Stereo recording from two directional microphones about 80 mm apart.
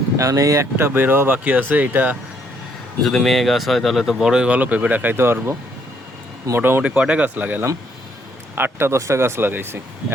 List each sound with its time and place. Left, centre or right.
0.2 s speech: right
3.0 s speech: centre; by 5.5 s right
6.6 s speech: right
6.8 s speech: centre